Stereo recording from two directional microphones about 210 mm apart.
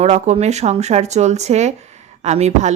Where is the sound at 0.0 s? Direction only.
30° right (ahead or behind).